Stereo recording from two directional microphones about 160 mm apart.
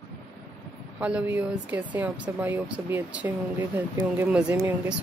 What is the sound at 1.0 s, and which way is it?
Speech, 10° right (ahead or behind).